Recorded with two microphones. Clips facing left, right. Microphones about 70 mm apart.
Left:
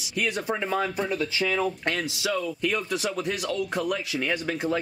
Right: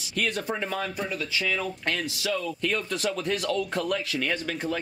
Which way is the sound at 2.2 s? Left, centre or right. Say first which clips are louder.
Left 2 dB; centre.